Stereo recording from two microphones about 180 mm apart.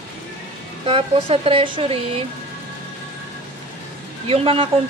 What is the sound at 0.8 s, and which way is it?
A woman's voice, 30° right (ahead or behind).